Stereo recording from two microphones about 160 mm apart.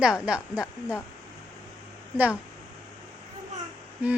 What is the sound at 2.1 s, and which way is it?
Speech, 10° right (ahead or behind).